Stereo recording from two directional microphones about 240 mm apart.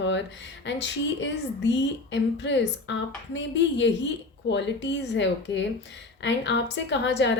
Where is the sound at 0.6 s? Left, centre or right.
Left.